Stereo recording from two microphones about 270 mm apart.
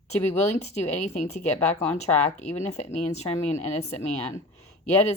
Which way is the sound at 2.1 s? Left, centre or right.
Centre.